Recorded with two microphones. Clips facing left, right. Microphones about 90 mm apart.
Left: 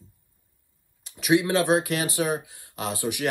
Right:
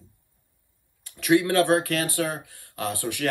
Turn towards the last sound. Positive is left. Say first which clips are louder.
# right 1 dB
turn(degrees=15)  # may be behind; listen again after turning